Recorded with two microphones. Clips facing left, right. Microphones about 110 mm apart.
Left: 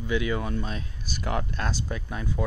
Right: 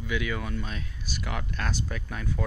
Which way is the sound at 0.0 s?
30° left (ahead or behind).